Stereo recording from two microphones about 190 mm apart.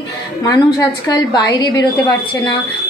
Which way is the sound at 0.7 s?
20° left (ahead or behind).